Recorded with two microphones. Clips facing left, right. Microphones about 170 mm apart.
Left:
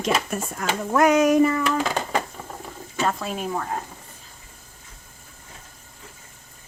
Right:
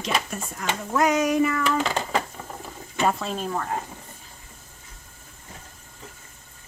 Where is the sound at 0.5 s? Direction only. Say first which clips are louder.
Left 3 dB; 60° left (ahead or behind).